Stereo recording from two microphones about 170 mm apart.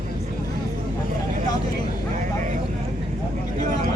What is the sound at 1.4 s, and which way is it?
Vehicle, 25° left (ahead or behind).